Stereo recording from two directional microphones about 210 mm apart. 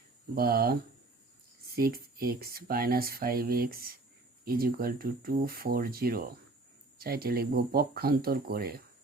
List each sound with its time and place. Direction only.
0.3 s speech: 45° right (ahead or behind)